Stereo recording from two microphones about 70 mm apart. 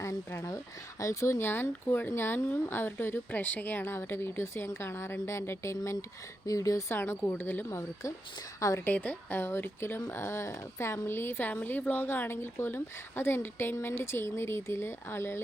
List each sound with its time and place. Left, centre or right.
0.4 s speech: left
6.9 s speech: left
7.7 s speech: left
8.8 s speech: left